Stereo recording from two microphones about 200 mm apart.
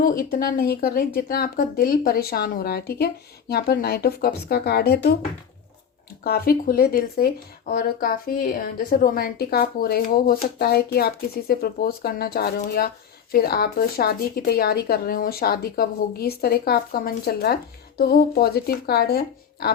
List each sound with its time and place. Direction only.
0.0 s speech: 45° left (ahead or behind)
6.2 s speech: 50° left (ahead or behind)